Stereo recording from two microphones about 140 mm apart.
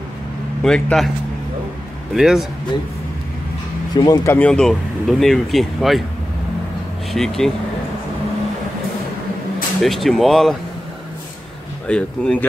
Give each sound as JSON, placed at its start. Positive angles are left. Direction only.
{"t": 0.6, "sound": "speech", "side_deg": 5}
{"t": 2.1, "sound": "speech", "side_deg": -5}
{"t": 3.9, "sound": "speech", "side_deg": 25}
{"t": 4.4, "sound": "speech", "side_deg": 5}
{"t": 7.1, "sound": "speech", "side_deg": 0}
{"t": 9.8, "sound": "speech", "side_deg": 0}
{"t": 11.9, "sound": "speech", "side_deg": 10}